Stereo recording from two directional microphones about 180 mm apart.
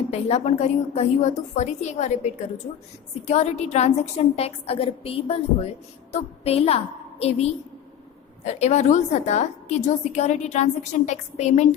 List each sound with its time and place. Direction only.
0.1 s a woman's voice: 35° left (ahead or behind)